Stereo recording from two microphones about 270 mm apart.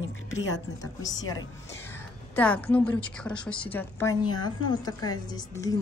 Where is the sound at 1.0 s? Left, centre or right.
Centre.